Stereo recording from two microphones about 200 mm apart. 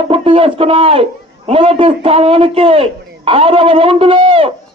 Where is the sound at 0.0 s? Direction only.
30° right (ahead or behind).